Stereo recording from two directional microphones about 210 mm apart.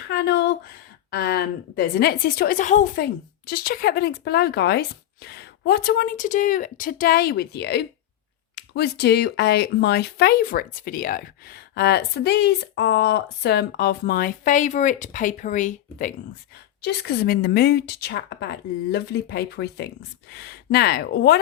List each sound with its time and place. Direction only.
0.1 s speech: 50° left (ahead or behind)
16.8 s speech: 50° left (ahead or behind)